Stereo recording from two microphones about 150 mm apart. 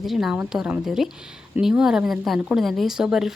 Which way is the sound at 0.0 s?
Centre (ahead or behind).